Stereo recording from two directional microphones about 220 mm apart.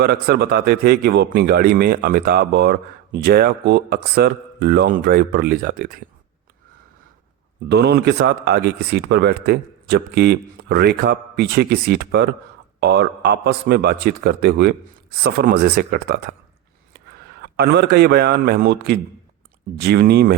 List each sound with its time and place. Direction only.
0.0 s a man's voice: 50° right (ahead or behind)
7.7 s a man's voice: 45° right (ahead or behind)
17.4 s a man's voice: 50° right (ahead or behind)